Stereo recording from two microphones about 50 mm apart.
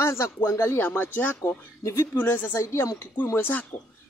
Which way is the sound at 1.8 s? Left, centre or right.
Left.